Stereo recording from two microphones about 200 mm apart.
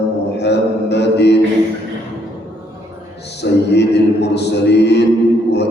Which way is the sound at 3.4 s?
55° left (ahead or behind).